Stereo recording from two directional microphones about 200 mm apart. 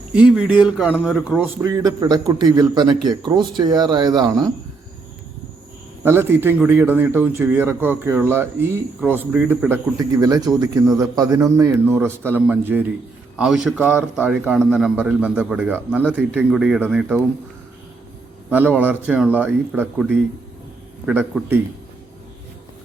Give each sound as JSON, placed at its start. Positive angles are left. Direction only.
{"t": 0.1, "sound": "a man's voice", "side_deg": -5}
{"t": 1.6, "sound": "a man's voice", "side_deg": -15}
{"t": 6.0, "sound": "a man's voice", "side_deg": -10}
{"t": 18.5, "sound": "a man's voice", "side_deg": -10}